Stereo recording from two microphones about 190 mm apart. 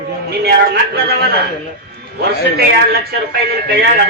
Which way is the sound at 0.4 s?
55° right (ahead or behind).